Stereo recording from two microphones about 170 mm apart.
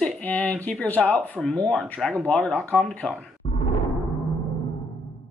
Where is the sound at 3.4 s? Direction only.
35° left (ahead or behind).